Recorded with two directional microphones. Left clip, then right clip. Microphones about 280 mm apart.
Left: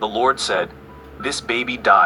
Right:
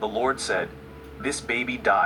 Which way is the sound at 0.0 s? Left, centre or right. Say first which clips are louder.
Left 7 dB; left.